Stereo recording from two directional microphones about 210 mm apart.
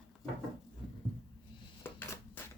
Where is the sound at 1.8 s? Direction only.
10° left (ahead or behind).